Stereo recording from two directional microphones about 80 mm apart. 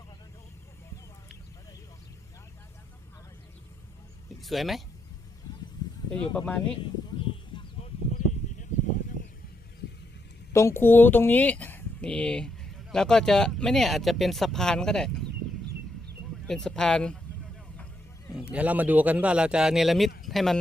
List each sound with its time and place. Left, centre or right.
4.4 s speech: centre
6.1 s speech: centre
7.5 s a sound: left
10.5 s speech: left; by 15.2 s centre
16.5 s speech: centre
18.5 s speech: centre